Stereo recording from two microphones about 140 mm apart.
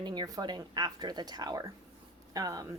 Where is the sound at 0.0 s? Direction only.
30° right (ahead or behind).